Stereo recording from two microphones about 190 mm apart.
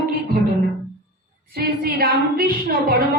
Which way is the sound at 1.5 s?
55° right (ahead or behind).